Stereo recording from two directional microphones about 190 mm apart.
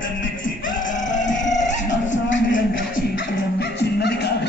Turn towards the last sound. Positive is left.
turn(degrees=65)  # may be behind; listen again after turning